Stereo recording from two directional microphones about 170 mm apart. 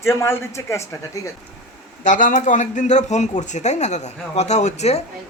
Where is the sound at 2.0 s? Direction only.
50° left (ahead or behind).